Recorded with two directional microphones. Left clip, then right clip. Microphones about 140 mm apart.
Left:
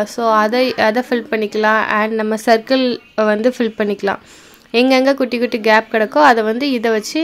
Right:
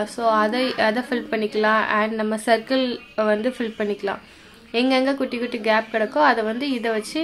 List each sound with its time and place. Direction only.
0.0 s speech: 50° left (ahead or behind)